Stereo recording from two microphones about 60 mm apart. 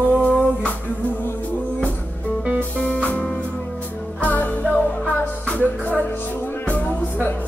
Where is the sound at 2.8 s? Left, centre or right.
Left.